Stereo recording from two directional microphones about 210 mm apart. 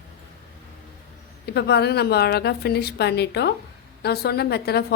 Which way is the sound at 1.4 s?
50° left (ahead or behind).